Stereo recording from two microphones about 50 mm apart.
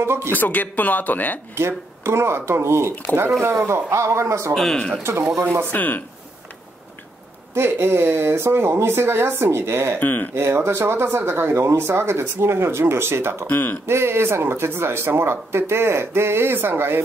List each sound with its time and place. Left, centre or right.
0.0 s speech: right
0.3 s speech: left
1.5 s speech: right
5.7 s speech: left
7.5 s speech: right
9.9 s speech: left
10.3 s speech: right
13.5 s speech: left
13.8 s speech: right